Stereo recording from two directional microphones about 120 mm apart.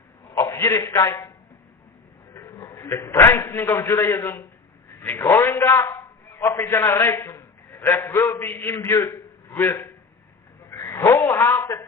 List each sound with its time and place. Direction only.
0.3 s a man's voice: 25° left (ahead or behind)
2.3 s a man's voice: 25° left (ahead or behind)
10.7 s a sound: 25° left (ahead or behind)